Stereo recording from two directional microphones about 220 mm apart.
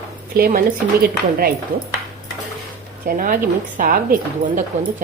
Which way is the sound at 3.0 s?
40° right (ahead or behind).